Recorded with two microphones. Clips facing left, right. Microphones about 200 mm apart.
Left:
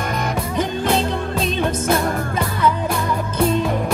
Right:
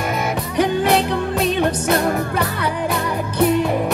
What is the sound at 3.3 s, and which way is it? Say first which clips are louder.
Music: right 3 dB; 15° right (ahead or behind).